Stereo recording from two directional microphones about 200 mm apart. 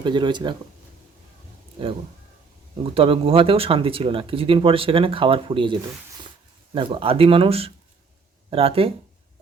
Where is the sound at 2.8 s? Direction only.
30° right (ahead or behind).